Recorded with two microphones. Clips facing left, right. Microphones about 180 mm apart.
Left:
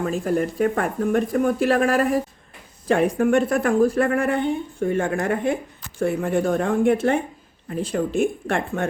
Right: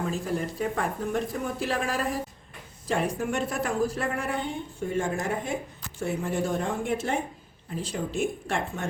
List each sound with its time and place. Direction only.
0.0 s a woman's voice: 60° left (ahead or behind)